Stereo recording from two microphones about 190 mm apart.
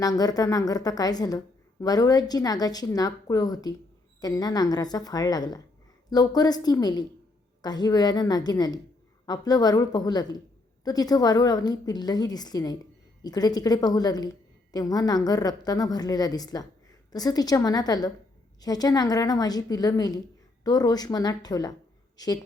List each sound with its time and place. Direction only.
0.0 s a woman's voice: 20° left (ahead or behind)